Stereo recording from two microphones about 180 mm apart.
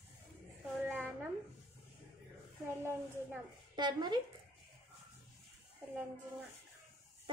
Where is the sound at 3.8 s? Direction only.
25° right (ahead or behind).